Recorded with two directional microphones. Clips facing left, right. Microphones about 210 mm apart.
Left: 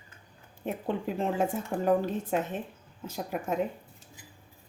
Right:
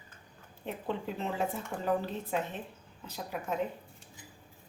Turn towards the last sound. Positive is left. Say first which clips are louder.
# left 4 dB
turn(degrees=45)  # may be behind; listen again after turning